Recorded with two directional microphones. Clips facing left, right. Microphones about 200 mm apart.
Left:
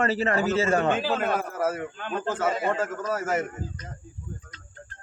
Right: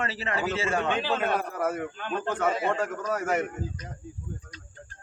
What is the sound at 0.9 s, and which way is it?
A man's voice, 5° left (ahead or behind).